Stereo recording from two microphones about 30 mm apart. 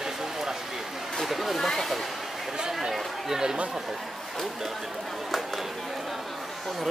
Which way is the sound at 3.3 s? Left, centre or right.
Right.